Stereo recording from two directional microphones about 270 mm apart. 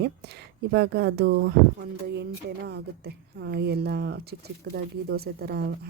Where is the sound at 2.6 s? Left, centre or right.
Right.